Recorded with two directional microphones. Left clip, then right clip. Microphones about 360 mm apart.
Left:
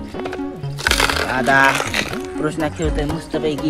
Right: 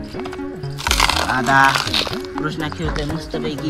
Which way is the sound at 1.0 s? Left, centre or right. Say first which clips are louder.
Even; centre.